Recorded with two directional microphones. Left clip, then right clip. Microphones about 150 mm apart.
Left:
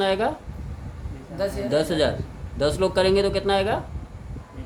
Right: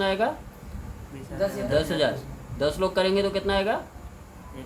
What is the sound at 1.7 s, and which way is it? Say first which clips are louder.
A man's voice: left 3 dB; 40° left (ahead or behind).